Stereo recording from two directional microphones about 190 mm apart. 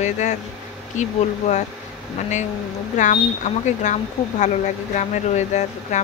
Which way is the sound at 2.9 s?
40° left (ahead or behind).